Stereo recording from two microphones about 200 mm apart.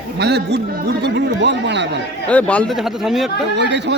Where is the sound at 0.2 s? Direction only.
55° right (ahead or behind).